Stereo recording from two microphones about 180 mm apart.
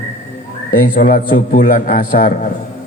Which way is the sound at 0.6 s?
50° left (ahead or behind).